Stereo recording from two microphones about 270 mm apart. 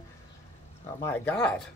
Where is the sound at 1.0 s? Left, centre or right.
Centre.